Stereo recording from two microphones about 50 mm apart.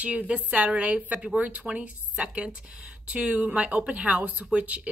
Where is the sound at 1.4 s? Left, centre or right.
Right.